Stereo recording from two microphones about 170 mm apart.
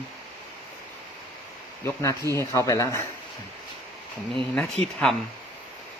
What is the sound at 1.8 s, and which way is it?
Speech, 15° left (ahead or behind).